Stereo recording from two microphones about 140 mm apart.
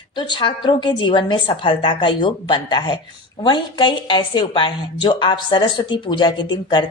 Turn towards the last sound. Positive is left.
turn(degrees=35)  # may be behind; listen again after turning